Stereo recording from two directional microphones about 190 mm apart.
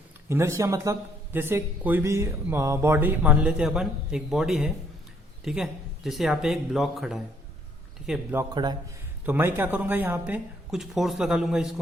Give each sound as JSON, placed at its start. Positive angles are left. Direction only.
{"t": 0.3, "sound": "speech", "side_deg": -15}
{"t": 8.4, "sound": "a man's voice", "side_deg": -20}
{"t": 9.2, "sound": "speech", "side_deg": -10}